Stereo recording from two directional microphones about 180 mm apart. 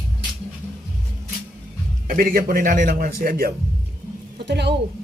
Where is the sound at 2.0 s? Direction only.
50° right (ahead or behind).